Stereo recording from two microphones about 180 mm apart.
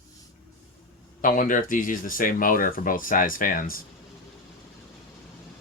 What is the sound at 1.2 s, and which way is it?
Speech, 45° left (ahead or behind).